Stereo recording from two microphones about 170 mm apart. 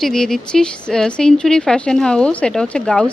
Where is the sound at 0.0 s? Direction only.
5° left (ahead or behind).